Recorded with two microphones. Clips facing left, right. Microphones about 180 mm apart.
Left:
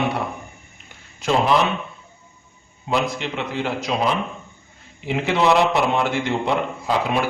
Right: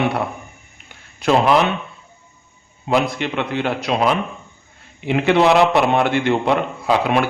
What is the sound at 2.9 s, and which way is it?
A man's voice, 65° right (ahead or behind).